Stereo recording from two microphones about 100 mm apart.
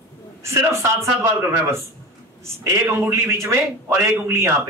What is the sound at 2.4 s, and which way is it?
A man's voice, 30° right (ahead or behind).